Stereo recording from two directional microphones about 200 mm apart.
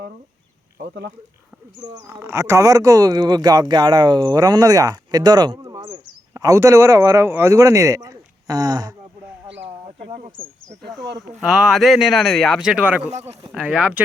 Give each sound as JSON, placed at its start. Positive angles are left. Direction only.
{"t": 1.9, "sound": "speech", "side_deg": -15}
{"t": 9.6, "sound": "a sound", "side_deg": -35}
{"t": 11.2, "sound": "speech", "side_deg": 0}
{"t": 13.1, "sound": "speech", "side_deg": -35}
{"t": 13.5, "sound": "speech", "side_deg": -5}